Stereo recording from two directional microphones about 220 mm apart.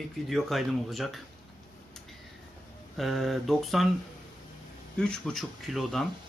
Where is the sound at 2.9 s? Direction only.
Centre (ahead or behind).